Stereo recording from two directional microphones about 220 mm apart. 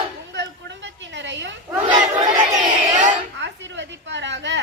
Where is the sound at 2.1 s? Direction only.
30° right (ahead or behind).